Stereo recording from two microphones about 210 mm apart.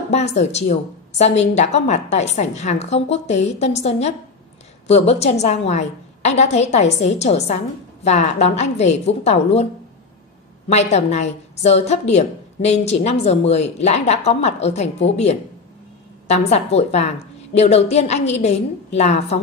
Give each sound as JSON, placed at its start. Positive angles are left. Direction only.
{"t": 0.1, "sound": "a woman's voice", "side_deg": 30}
{"t": 10.7, "sound": "a woman's voice", "side_deg": 30}